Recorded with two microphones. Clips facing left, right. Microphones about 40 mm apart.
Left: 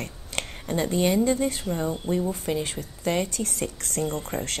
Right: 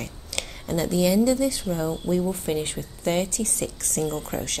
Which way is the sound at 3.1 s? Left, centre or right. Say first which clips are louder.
Right 1 dB; right.